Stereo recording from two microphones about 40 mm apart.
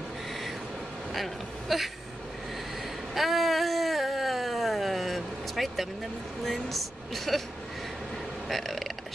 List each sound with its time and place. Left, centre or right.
0.3 s train: centre
1.1 s speech: centre
3.2 s a sound: centre
6.4 s a woman's voice: centre
8.5 s burping: centre